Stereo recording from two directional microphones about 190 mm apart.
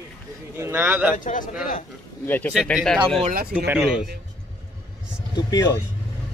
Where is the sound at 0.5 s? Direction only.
15° right (ahead or behind).